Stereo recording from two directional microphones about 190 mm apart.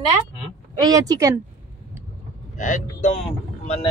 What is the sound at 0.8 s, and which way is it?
Speech, 20° right (ahead or behind).